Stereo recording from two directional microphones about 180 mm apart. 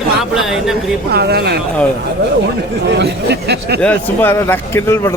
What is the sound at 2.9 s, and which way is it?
Speech, 70° right (ahead or behind).